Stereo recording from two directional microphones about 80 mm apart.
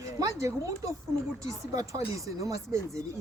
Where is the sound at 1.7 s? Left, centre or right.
Right.